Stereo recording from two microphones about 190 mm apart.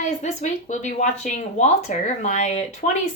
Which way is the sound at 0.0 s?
40° left (ahead or behind).